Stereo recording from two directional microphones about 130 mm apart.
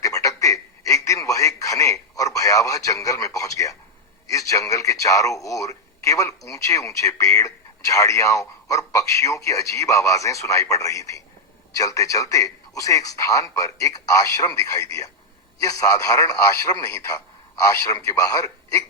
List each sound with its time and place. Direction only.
0.0 s radio: 25° left (ahead or behind)
4.3 s speech: 25° left (ahead or behind)